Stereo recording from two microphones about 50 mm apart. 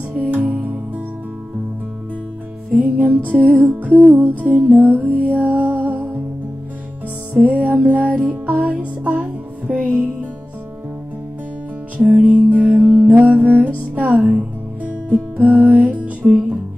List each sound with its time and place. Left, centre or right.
0.3 s music: right
2.7 s music: right
7.4 s music: right
12.0 s music: right